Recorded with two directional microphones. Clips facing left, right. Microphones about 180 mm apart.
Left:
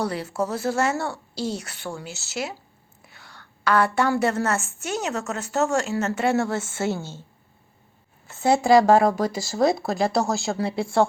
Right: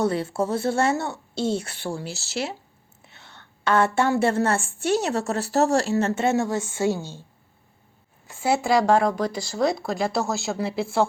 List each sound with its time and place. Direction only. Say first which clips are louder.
0.0 s a woman's voice: right 3 dB; 25° right (ahead or behind)
8.3 s speech: left 4 dB; 10° right (ahead or behind)